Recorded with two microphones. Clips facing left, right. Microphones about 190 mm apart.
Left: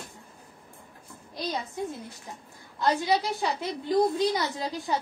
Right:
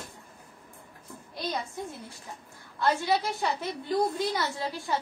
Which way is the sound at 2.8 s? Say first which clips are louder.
Left 1 dB; 20° left (ahead or behind).